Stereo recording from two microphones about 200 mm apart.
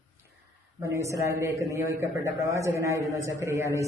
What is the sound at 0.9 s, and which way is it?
A man's voice, 15° right (ahead or behind).